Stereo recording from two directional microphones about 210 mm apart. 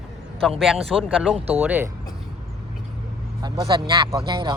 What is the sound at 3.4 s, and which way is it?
Speech, 20° right (ahead or behind).